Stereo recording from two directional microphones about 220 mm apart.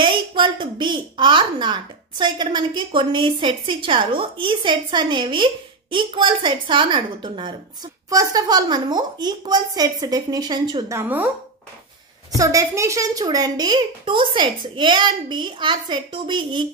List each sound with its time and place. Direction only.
0.0 s a woman's voice: 20° right (ahead or behind)
12.4 s speech: 15° right (ahead or behind)